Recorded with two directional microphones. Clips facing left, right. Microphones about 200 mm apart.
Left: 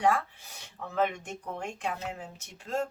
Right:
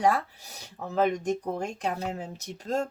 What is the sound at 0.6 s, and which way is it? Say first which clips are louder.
Speech: right 4 dB; 40° right (ahead or behind).